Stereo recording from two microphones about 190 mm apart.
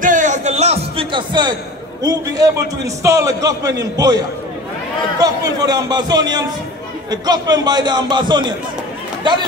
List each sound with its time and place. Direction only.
0.0 s music: 40° right (ahead or behind); by 1.5 s 25° right (ahead or behind)
2.0 s a man's voice: 20° right (ahead or behind)
5.2 s a man's voice: 20° right (ahead or behind)